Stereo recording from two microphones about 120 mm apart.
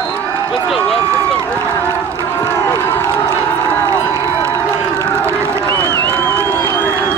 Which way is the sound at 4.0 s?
20° left (ahead or behind).